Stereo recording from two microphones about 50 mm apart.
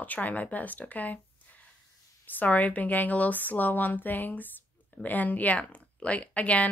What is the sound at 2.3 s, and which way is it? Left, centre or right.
Speech, left.